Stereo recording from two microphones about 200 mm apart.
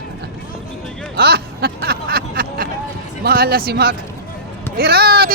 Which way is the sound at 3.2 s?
50° right (ahead or behind).